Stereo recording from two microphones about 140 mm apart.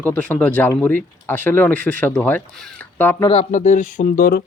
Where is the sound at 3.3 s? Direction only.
55° left (ahead or behind).